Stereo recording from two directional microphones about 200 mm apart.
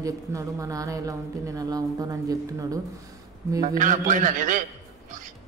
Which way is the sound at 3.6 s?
40° right (ahead or behind).